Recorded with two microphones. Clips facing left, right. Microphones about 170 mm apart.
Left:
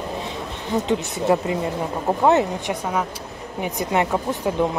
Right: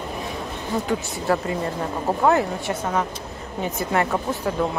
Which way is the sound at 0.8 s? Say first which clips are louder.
Left 4 dB; 20° left (ahead or behind).